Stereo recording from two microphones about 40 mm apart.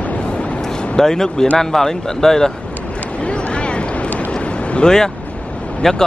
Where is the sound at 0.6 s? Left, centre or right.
Centre.